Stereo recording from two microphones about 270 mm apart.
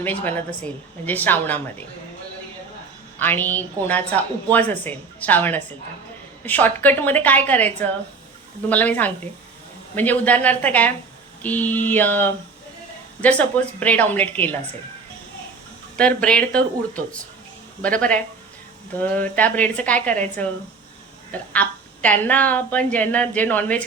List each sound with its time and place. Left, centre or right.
0.0 s a woman's voice: centre
3.2 s a woman's voice: centre
16.0 s a woman's voice: centre